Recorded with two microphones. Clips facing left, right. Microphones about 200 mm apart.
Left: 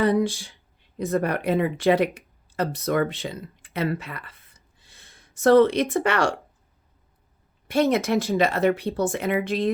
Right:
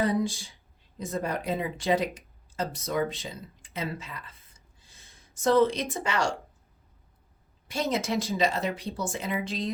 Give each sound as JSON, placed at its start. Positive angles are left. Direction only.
{"t": 0.8, "sound": "speech", "side_deg": 65}
{"t": 5.4, "sound": "speech", "side_deg": 65}
{"t": 7.7, "sound": "speech", "side_deg": 60}